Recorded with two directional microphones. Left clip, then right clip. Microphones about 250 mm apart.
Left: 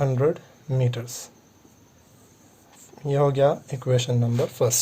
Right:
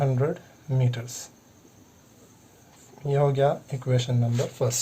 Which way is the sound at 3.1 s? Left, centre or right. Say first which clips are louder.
Left 3 dB; left.